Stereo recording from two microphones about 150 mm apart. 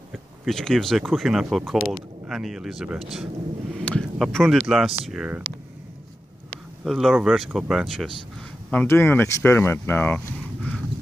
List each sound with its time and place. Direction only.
0.5 s speech: 5° left (ahead or behind)
6.8 s speech: centre (ahead or behind)
8.8 s speech: 15° left (ahead or behind)